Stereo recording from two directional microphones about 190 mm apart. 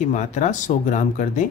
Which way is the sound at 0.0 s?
40° left (ahead or behind).